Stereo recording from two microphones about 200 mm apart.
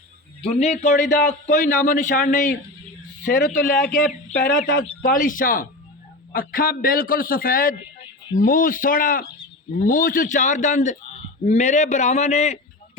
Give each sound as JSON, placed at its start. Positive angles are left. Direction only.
{"t": 0.4, "sound": "a man's voice", "side_deg": 35}
{"t": 3.8, "sound": "a man's voice", "side_deg": 5}
{"t": 4.4, "sound": "a man's voice", "side_deg": 40}